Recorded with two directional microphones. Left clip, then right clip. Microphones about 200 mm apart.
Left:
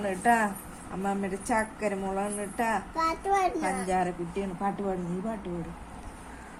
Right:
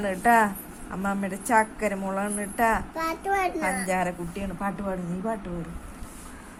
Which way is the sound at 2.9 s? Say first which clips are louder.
Even; 5° right (ahead or behind).